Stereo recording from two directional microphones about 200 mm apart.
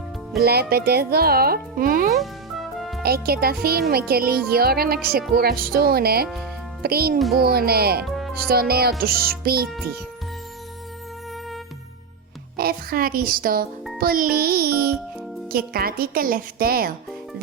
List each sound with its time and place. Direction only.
0.4 s speech: 50° right (ahead or behind)
2.0 s music: centre (ahead or behind)
3.0 s speech: 50° right (ahead or behind)
8.0 s music: centre (ahead or behind)
8.4 s speech: 50° right (ahead or behind)
12.5 s a child's voice: 50° right (ahead or behind)